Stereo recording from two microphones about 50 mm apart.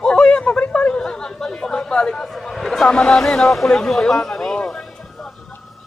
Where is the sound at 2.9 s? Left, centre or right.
Centre.